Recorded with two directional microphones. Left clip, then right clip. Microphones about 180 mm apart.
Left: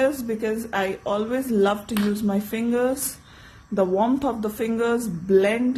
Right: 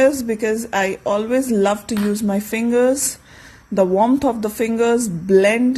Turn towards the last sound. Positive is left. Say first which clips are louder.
# right 5 dB
turn(degrees=-40)  # may be behind; listen again after turning